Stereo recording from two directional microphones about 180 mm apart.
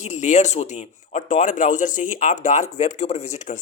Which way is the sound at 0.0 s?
40° left (ahead or behind).